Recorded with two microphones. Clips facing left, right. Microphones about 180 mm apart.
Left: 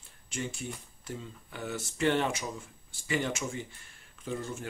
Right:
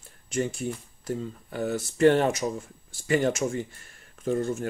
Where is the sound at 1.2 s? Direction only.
40° right (ahead or behind).